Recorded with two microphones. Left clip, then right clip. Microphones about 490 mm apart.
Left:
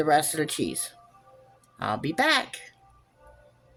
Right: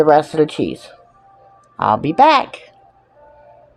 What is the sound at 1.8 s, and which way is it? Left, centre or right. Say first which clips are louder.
Speech: right 14 dB; left.